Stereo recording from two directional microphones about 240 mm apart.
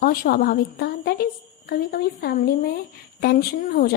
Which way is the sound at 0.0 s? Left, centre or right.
Left.